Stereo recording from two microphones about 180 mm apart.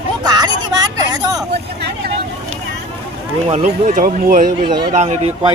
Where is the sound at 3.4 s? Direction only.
35° right (ahead or behind); by 4.5 s 50° right (ahead or behind).